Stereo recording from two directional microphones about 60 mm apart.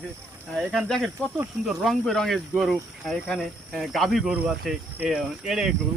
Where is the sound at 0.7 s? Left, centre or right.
Centre.